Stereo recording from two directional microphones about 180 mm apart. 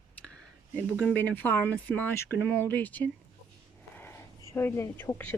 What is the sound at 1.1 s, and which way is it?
Speech, 10° left (ahead or behind).